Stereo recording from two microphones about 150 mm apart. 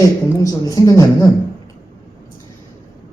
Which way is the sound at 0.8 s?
20° left (ahead or behind).